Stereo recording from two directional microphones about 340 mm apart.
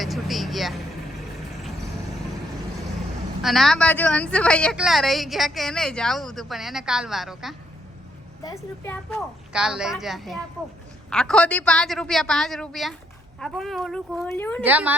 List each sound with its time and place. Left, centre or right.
0.0 s vehicle: centre
3.4 s speech: centre
14.6 s speech: centre